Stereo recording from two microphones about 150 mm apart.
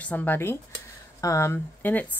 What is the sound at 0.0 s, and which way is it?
Speech, 10° left (ahead or behind).